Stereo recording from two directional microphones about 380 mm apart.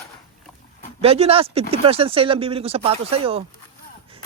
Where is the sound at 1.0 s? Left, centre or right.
Centre.